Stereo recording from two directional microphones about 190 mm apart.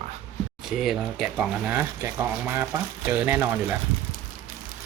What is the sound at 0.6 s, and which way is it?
Speech, centre (ahead or behind).